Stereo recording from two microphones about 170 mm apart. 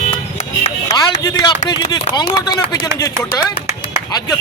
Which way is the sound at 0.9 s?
20° left (ahead or behind).